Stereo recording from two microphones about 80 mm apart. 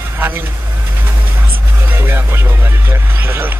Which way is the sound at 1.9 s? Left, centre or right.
Right.